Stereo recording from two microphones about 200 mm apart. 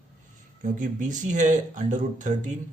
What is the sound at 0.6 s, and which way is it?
Speech, 40° right (ahead or behind).